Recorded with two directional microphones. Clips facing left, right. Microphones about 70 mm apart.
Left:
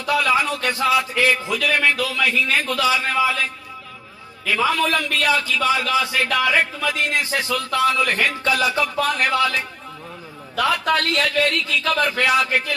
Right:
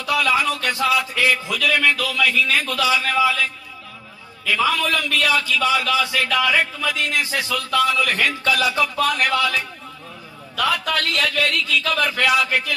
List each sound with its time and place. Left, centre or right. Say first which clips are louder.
0.0 s a man's voice: left 1 dB; left
4.4 s a man's voice: even; left